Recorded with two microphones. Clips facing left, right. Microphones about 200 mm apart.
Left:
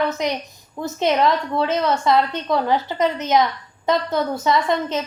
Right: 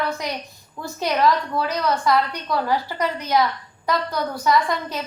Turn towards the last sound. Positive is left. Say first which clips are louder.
# left 2 dB
turn(degrees=20)  # may be behind; listen again after turning